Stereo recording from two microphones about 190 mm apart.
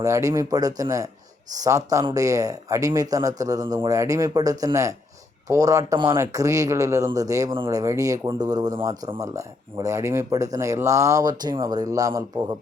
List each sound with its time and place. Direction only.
0.0 s speech: 15° right (ahead or behind)